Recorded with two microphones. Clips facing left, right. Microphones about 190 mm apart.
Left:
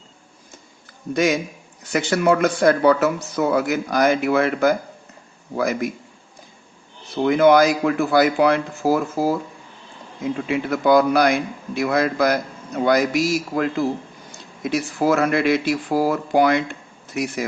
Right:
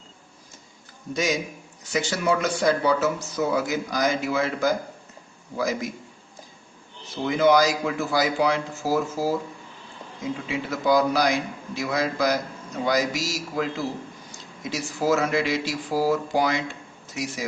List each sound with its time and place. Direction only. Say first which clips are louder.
1.1 s speech: left 6 dB; 55° left (ahead or behind)
7.3 s speech: left 5 dB; 55° left (ahead or behind)
10.5 s speech: left 5 dB; 60° left (ahead or behind)